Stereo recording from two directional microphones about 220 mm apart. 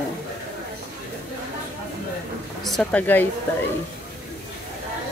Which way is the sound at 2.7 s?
5° left (ahead or behind).